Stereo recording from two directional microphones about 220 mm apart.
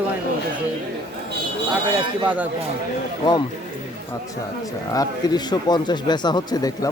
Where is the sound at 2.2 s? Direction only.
5° right (ahead or behind).